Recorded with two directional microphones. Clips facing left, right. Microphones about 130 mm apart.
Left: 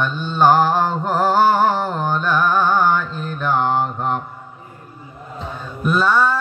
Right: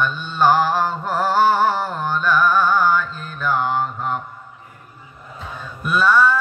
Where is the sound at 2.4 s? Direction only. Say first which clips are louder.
Even; 20° left (ahead or behind).